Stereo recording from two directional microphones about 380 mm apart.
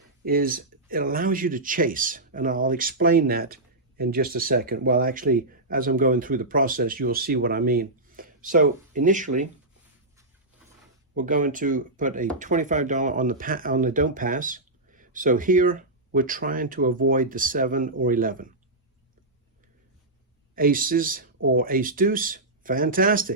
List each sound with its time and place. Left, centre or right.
0.3 s speech: right
11.1 s speech: right
20.6 s speech: right